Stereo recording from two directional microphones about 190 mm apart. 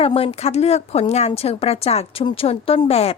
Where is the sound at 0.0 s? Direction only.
30° left (ahead or behind).